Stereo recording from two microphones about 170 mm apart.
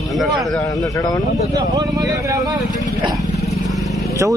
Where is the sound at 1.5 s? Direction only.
20° right (ahead or behind).